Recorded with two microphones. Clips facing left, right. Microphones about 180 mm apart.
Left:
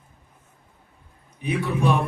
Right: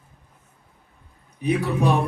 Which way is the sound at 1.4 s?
40° right (ahead or behind).